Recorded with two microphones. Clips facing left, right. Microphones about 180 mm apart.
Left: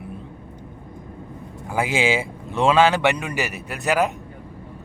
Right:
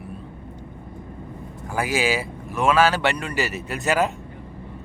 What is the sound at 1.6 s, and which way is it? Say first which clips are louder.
Speech: left 2 dB; 20° left (ahead or behind).